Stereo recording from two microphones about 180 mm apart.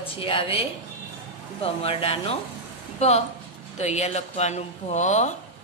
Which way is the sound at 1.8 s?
30° left (ahead or behind).